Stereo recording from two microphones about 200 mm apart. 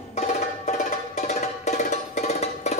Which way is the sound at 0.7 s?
35° left (ahead or behind).